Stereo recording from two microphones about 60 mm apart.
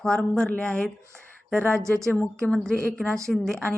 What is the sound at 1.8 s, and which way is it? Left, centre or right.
Speech, right.